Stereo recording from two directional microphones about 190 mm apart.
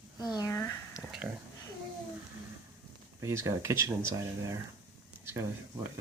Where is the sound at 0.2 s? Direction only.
20° left (ahead or behind).